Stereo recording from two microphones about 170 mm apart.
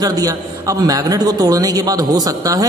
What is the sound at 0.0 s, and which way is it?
A man's voice, 20° right (ahead or behind).